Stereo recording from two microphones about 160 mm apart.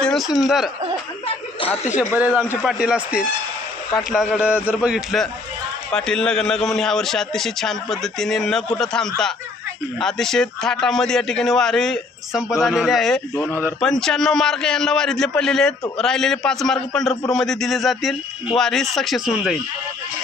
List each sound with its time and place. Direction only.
0.0 s speech: centre (ahead or behind)
2.1 s a man's voice: 10° right (ahead or behind)
13.3 s speech: 15° left (ahead or behind)
13.8 s a man's voice: 5° left (ahead or behind)